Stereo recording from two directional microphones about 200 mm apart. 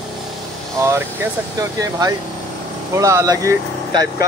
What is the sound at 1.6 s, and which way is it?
Speech, 15° right (ahead or behind).